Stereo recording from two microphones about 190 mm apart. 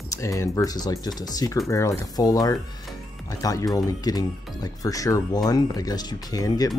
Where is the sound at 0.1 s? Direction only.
15° left (ahead or behind).